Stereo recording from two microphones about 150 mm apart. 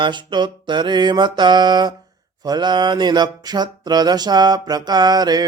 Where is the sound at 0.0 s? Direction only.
30° right (ahead or behind).